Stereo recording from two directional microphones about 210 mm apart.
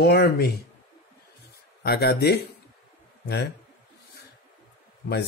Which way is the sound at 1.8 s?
50° left (ahead or behind).